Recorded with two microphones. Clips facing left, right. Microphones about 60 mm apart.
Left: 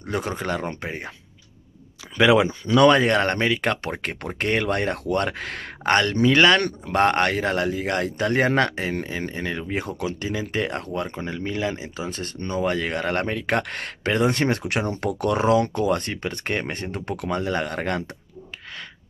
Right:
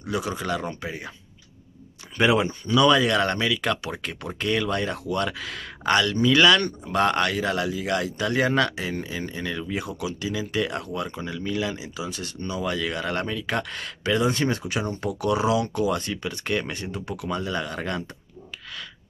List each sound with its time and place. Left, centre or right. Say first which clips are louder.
0.0 s speech: left 1 dB; left
2.1 s speech: left 4 dB; left
2.7 s speech: left 3 dB; left
6.6 s speech: left 3 dB; left